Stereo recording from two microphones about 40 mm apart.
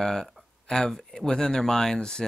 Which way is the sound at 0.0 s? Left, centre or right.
Centre.